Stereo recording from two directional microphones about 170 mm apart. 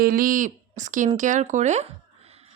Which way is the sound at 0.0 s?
55° right (ahead or behind).